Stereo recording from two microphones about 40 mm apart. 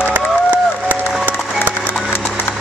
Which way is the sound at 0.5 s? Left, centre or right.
Right.